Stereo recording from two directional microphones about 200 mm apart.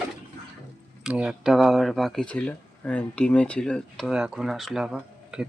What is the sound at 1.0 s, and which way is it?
Speech, 5° right (ahead or behind).